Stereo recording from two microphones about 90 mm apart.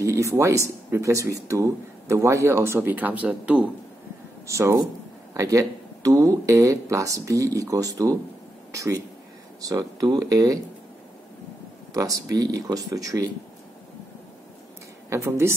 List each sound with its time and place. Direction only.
0.0 s speech: 35° right (ahead or behind); by 3.6 s 15° right (ahead or behind)
4.5 s speech: 35° right (ahead or behind)
9.6 s speech: 40° right (ahead or behind)
11.9 s speech: 40° right (ahead or behind)
15.0 s speech: 30° right (ahead or behind)